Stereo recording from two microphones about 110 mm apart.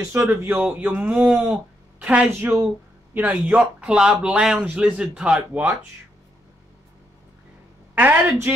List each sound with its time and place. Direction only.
0.0 s speech: 20° right (ahead or behind)
7.9 s speech: 15° right (ahead or behind)